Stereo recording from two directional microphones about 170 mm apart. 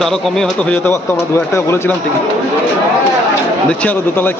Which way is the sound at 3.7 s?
10° left (ahead or behind).